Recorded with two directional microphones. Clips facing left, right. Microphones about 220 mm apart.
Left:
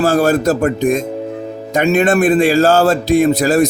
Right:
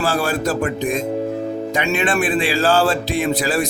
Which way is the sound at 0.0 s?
45° left (ahead or behind).